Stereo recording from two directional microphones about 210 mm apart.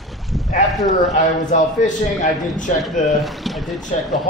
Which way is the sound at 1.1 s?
35° left (ahead or behind).